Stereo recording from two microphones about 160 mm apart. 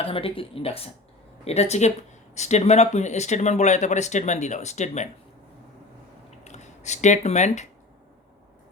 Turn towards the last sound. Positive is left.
turn(degrees=45)  # may be behind; listen again after turning